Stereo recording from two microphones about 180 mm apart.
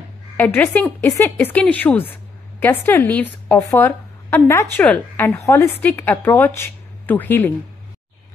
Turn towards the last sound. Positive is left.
turn(degrees=10)  # may be behind; listen again after turning